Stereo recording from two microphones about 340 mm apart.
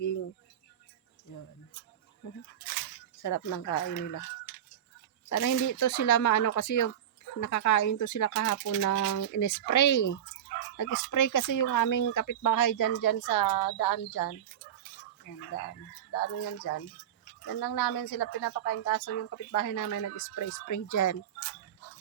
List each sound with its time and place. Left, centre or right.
2.2 s a woman's voice: left
5.3 s a woman's voice: left
16.1 s a woman's voice: left